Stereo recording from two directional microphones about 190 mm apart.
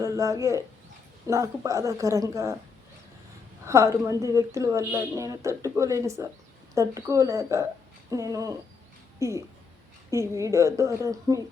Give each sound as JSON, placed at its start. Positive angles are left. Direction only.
{"t": 0.0, "sound": "speech", "side_deg": -15}
{"t": 3.7, "sound": "speech", "side_deg": -15}